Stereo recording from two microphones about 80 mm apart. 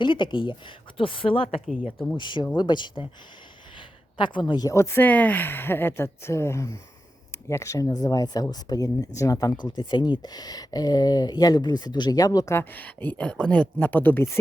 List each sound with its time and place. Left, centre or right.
0.0 s speech: left
1.6 s speech: centre
2.1 s speech: left
3.8 s a sound: left
4.7 s speech: left
5.0 s speech: centre; by 7.9 s left
7.9 s speech: left
9.6 s speech: left
12.5 s speech: left